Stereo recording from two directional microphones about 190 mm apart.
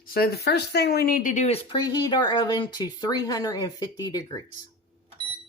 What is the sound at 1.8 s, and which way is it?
Speech, 20° left (ahead or behind).